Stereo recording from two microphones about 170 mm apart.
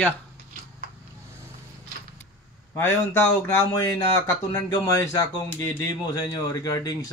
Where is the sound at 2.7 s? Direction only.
15° left (ahead or behind).